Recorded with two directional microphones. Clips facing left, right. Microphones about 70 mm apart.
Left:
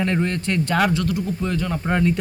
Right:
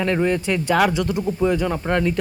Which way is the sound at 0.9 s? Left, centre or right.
Centre.